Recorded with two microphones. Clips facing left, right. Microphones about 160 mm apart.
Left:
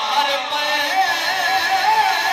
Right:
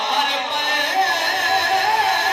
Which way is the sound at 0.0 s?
65° right (ahead or behind).